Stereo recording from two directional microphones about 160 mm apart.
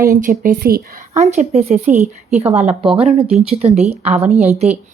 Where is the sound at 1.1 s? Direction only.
45° right (ahead or behind).